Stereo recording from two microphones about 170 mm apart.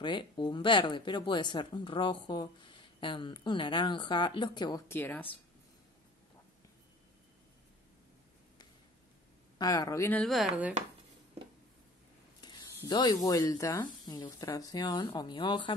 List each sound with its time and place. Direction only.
0.0 s speech: 25° left (ahead or behind)
4.8 s a woman's voice: 10° left (ahead or behind)
9.6 s speech: 20° left (ahead or behind)
10.2 s speech: centre (ahead or behind)
12.4 s speech: 25° left (ahead or behind)